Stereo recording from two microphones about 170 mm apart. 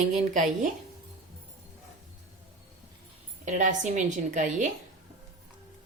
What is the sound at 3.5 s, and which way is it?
A woman's voice, 45° right (ahead or behind).